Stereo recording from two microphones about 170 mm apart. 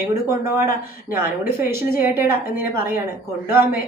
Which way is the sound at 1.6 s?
60° left (ahead or behind).